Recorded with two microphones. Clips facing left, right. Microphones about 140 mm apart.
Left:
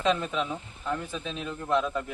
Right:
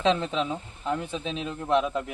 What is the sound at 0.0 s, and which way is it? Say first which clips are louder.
Speech: right 2 dB; 25° right (ahead or behind).